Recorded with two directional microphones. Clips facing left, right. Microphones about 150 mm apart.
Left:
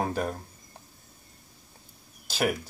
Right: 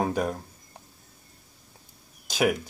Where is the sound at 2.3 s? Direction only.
Centre (ahead or behind).